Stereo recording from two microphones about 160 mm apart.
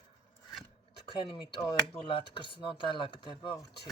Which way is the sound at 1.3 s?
30° left (ahead or behind).